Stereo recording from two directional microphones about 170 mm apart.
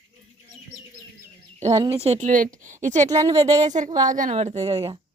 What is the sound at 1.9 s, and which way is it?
Speech, 40° right (ahead or behind).